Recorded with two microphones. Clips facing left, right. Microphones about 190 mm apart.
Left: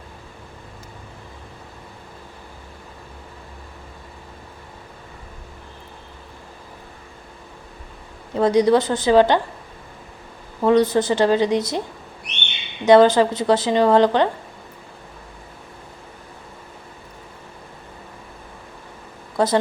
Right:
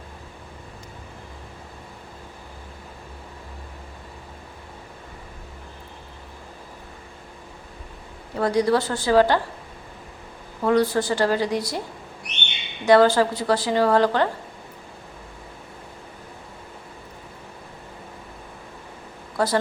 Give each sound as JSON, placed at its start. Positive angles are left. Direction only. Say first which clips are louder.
{"t": 8.4, "sound": "a woman's voice", "louder": "left 5 dB", "side_deg": 20}
{"t": 10.6, "sound": "a woman's voice", "louder": "left 4 dB", "side_deg": 20}
{"t": 12.8, "sound": "a woman's voice", "louder": "left 3 dB", "side_deg": 20}
{"t": 19.4, "sound": "a woman's voice", "louder": "left 4 dB", "side_deg": 20}